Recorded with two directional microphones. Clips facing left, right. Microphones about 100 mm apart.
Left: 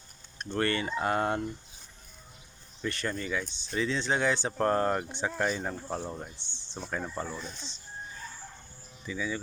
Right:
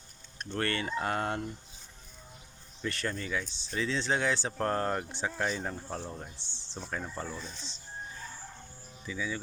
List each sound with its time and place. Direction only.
0.3 s speech: 5° left (ahead or behind)
2.8 s speech: centre (ahead or behind)
6.3 s speech: 35° right (ahead or behind)
6.9 s speech: 10° left (ahead or behind)
9.0 s speech: centre (ahead or behind)